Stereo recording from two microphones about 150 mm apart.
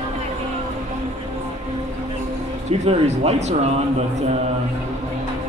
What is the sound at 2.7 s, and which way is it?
Speech, 45° right (ahead or behind).